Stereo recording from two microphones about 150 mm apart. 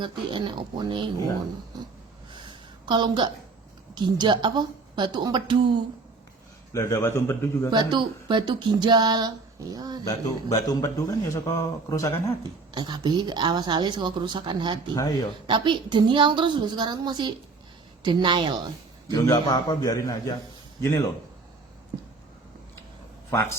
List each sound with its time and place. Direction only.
0.0 s a woman's voice: 30° right (ahead or behind)
2.3 s a sound: 30° right (ahead or behind)
3.9 s speech: 30° right (ahead or behind)
6.7 s a man's voice: 20° left (ahead or behind)
7.7 s speech: 30° right (ahead or behind)
10.1 s a man's voice: 25° left (ahead or behind)
12.4 s speech: 30° right (ahead or behind)
14.9 s a man's voice: 25° left (ahead or behind)
15.4 s a woman's voice: 30° right (ahead or behind)
19.1 s a man's voice: 25° left (ahead or behind)